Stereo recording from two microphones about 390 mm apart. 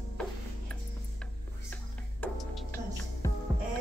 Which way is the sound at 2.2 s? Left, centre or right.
Centre.